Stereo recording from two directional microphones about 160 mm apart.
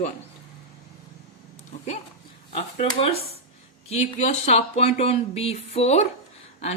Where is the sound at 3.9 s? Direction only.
40° left (ahead or behind).